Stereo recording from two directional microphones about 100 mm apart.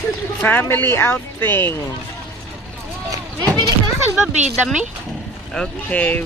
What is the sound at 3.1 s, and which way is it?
Speech, 35° right (ahead or behind).